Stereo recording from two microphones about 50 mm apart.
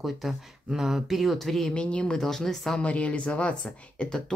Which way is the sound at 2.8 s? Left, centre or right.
Left.